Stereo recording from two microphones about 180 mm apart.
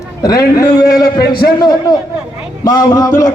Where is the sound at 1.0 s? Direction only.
60° left (ahead or behind).